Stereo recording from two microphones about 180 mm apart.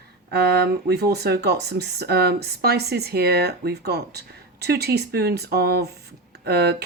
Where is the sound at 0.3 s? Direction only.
65° right (ahead or behind).